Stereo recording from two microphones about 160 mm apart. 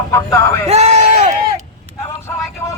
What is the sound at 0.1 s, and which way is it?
Speech, 15° left (ahead or behind).